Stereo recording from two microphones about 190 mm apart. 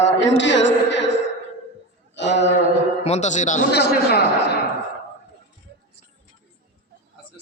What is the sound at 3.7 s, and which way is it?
Speech, 60° left (ahead or behind).